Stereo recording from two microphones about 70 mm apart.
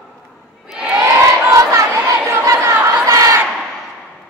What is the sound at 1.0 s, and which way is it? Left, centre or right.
Crowd, right.